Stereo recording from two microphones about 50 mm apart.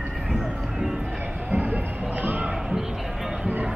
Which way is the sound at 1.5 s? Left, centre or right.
Right.